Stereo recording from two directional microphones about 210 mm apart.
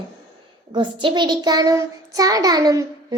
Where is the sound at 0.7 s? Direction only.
25° right (ahead or behind).